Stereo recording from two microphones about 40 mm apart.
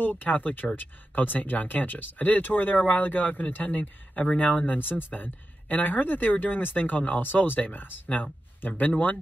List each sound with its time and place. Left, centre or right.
0.0 s speech: left